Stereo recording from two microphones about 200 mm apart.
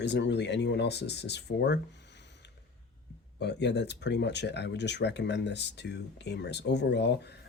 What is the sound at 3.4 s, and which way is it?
Speech, 60° left (ahead or behind).